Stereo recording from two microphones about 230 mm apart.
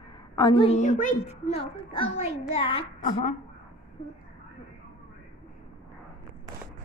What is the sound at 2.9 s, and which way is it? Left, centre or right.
Speech, left.